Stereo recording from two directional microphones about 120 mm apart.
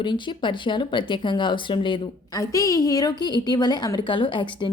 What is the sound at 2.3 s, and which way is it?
A woman's voice, 30° left (ahead or behind).